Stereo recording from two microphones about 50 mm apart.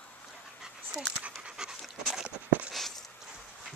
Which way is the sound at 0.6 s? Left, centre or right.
Centre.